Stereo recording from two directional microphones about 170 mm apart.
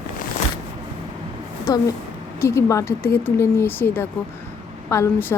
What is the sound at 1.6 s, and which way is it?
Speech, 20° left (ahead or behind).